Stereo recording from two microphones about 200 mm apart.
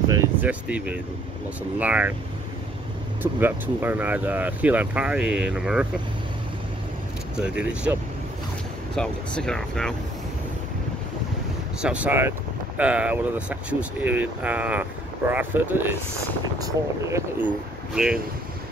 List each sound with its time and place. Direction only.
0.1 s a sound: 10° right (ahead or behind)
1.8 s speech: 5° right (ahead or behind)
3.2 s speech: 10° right (ahead or behind)
7.3 s speech: 5° right (ahead or behind)
11.8 s speech: 5° right (ahead or behind)
17.9 s speech: 5° right (ahead or behind)